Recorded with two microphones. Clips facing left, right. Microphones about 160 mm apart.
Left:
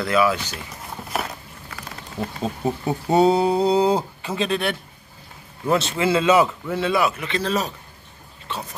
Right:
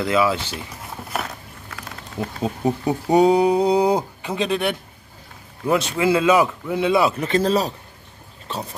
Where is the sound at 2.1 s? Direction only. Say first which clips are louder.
Right 2 dB; 15° right (ahead or behind).